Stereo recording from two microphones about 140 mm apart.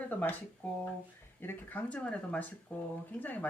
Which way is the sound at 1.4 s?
15° left (ahead or behind).